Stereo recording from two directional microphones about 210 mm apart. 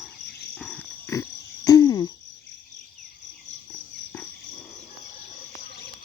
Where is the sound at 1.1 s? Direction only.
15° left (ahead or behind).